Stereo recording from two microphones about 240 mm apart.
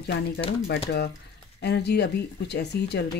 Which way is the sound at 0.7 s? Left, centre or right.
Left.